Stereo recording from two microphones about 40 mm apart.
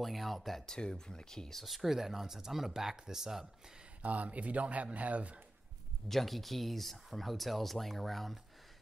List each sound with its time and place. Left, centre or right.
0.0 s speech: centre
0.7 s speech: centre
1.6 s speech: centre
4.0 s a man's voice: right
6.0 s speech: centre